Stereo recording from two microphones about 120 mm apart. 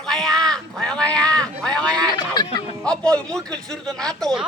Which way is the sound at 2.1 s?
35° left (ahead or behind).